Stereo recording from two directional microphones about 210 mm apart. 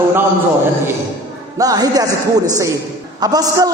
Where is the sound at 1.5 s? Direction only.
15° right (ahead or behind).